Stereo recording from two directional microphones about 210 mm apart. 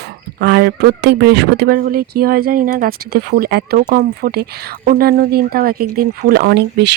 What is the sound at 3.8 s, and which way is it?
Speech, 40° right (ahead or behind).